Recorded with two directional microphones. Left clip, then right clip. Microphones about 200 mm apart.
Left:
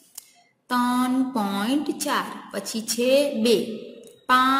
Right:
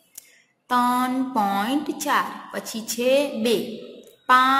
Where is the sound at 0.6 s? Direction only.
10° left (ahead or behind).